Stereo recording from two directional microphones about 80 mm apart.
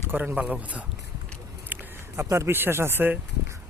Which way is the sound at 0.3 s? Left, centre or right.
Centre.